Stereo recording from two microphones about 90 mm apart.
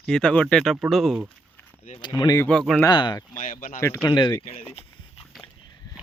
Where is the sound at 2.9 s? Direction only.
55° left (ahead or behind).